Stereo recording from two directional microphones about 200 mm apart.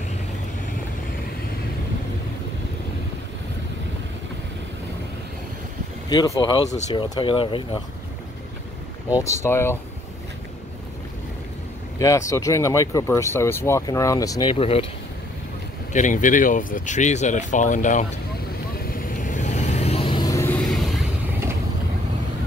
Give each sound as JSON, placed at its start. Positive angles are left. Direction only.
{"t": 6.0, "sound": "speech", "side_deg": 20}
{"t": 9.2, "sound": "speech", "side_deg": 15}
{"t": 12.0, "sound": "speech", "side_deg": 15}
{"t": 15.9, "sound": "speech", "side_deg": 40}
{"t": 18.9, "sound": "vehicle", "side_deg": 45}
{"t": 20.6, "sound": "vehicle", "side_deg": 0}